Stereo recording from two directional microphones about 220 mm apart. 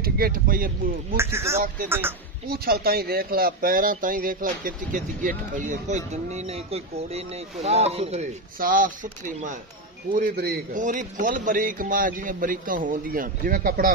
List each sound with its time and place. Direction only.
0.0 s speech: 40° right (ahead or behind)
1.1 s a man's voice: 10° right (ahead or behind)
2.5 s speech: 45° right (ahead or behind)
10.1 s speech: 40° right (ahead or behind)